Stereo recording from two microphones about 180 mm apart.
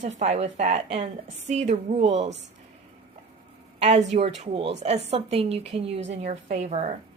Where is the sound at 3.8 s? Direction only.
40° right (ahead or behind).